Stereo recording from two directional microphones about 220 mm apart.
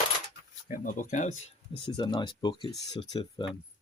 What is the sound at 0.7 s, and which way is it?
Speech, 35° left (ahead or behind).